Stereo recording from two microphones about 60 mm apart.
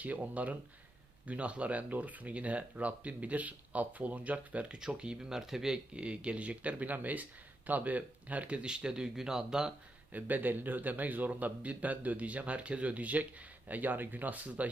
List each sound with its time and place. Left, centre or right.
0.0 s speech: right; by 9.7 s centre
10.1 s speech: right